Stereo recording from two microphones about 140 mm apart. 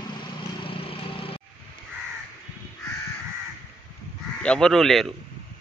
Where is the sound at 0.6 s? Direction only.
40° left (ahead or behind).